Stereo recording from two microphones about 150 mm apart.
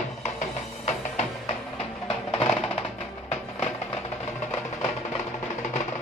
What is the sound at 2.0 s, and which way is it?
Music, 40° left (ahead or behind).